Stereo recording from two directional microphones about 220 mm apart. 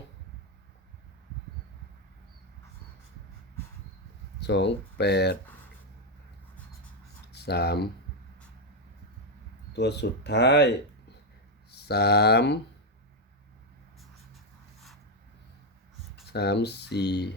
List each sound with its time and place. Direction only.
4.4 s speech: 50° left (ahead or behind)
7.3 s speech: 45° left (ahead or behind)
9.7 s speech: 50° left (ahead or behind)
16.2 s speech: 50° left (ahead or behind)